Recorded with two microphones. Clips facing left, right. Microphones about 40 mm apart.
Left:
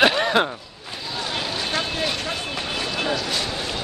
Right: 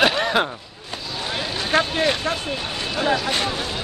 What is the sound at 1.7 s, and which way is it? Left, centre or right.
Vehicle, right.